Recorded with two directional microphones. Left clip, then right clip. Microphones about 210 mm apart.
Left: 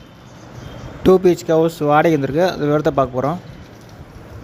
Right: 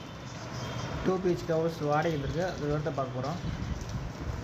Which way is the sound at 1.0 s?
45° left (ahead or behind).